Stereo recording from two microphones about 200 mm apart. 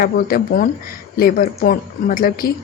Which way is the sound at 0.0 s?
45° left (ahead or behind).